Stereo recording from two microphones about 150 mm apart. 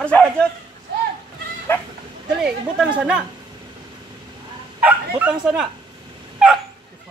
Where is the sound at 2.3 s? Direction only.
5° right (ahead or behind).